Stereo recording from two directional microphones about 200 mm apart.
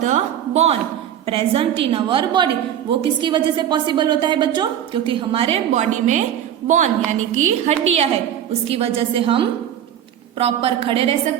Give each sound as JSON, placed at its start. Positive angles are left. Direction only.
{"t": 0.0, "sound": "a woman's voice", "side_deg": -35}